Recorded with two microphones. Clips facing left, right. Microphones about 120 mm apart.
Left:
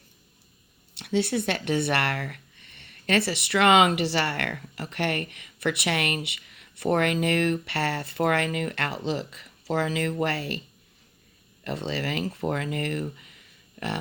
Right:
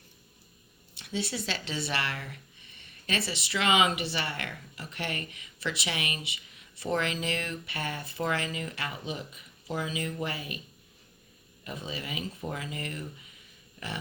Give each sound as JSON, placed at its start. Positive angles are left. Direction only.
{"t": 0.9, "sound": "speech", "side_deg": 65}
{"t": 11.6, "sound": "speech", "side_deg": 75}